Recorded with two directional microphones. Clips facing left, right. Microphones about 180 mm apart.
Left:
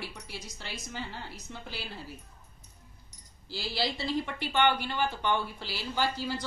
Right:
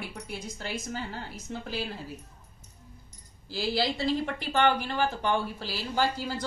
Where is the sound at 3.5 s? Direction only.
45° right (ahead or behind).